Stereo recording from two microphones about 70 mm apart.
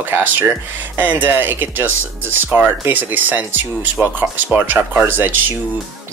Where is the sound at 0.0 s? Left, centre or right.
Right.